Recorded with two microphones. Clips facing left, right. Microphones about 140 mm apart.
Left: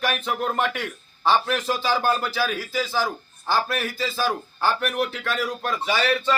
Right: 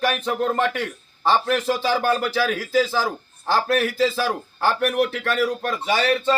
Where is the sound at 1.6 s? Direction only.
60° right (ahead or behind).